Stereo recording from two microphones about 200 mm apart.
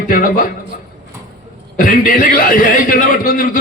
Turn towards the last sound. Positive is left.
turn(degrees=45)  # may be behind; listen again after turning